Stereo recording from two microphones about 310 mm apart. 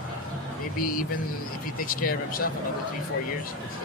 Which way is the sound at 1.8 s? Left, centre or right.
Left.